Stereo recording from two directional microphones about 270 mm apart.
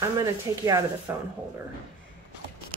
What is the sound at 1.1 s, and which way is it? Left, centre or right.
Speech, centre.